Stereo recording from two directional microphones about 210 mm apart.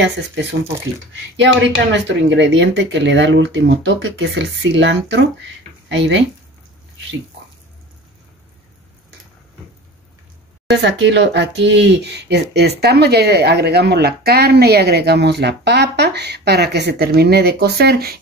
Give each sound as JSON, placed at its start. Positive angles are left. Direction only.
{"t": 0.0, "sound": "speech", "side_deg": -55}
{"t": 2.0, "sound": "speech", "side_deg": -60}
{"t": 10.7, "sound": "speech", "side_deg": -55}